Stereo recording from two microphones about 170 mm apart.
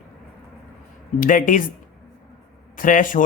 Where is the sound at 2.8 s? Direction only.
50° left (ahead or behind).